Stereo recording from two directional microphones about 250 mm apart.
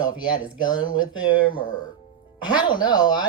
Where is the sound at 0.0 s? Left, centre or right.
Centre.